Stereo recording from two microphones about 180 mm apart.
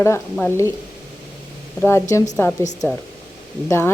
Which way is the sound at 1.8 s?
15° left (ahead or behind).